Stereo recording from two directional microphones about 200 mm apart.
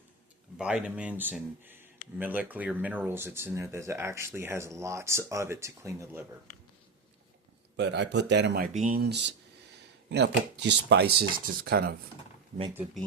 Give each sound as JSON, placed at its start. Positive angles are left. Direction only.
{"t": 0.6, "sound": "speech", "side_deg": -5}
{"t": 7.8, "sound": "speech", "side_deg": -60}